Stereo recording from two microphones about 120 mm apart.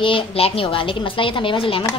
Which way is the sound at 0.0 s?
50° left (ahead or behind).